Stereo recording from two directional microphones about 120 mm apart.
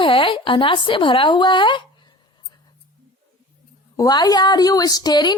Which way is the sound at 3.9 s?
30° left (ahead or behind).